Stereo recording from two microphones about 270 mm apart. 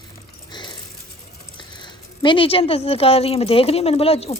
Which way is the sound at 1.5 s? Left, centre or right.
Centre.